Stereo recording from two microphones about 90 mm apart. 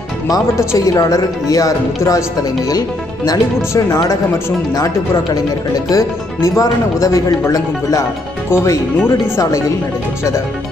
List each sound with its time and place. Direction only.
0.7 s speech: 40° left (ahead or behind)
3.3 s speech: 35° left (ahead or behind)
8.5 s speech: 30° left (ahead or behind)